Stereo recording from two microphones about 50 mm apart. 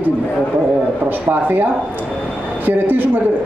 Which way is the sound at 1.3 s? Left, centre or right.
Right.